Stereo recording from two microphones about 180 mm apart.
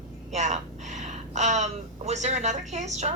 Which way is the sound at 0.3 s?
40° right (ahead or behind).